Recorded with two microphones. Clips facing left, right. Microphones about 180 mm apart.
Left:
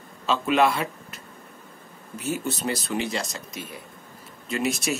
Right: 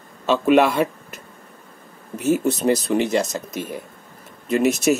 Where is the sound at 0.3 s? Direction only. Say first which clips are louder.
Right 6 dB; 60° right (ahead or behind).